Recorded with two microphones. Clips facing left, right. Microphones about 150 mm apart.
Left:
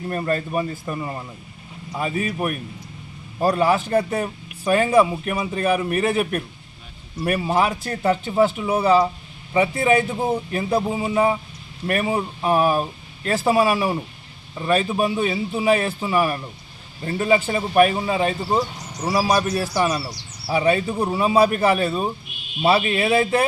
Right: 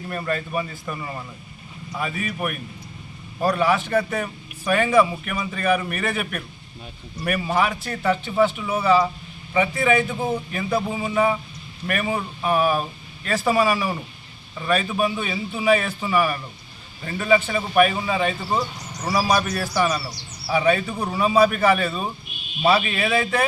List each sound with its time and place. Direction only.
0.3 s a man's voice: 35° left (ahead or behind)